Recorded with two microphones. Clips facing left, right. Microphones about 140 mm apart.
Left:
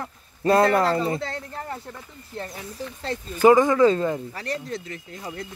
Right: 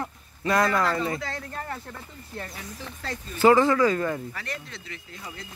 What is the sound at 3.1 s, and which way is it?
Speech, 30° left (ahead or behind).